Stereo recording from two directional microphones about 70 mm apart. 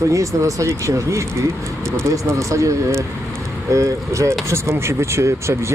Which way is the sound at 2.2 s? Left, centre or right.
Right.